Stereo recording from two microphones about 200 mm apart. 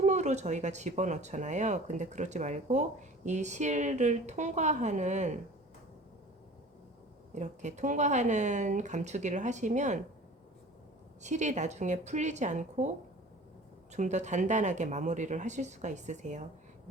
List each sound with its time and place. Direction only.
0.0 s speech: 35° right (ahead or behind)
7.3 s speech: 35° right (ahead or behind)
11.2 s speech: 35° right (ahead or behind)
13.9 s speech: 35° right (ahead or behind)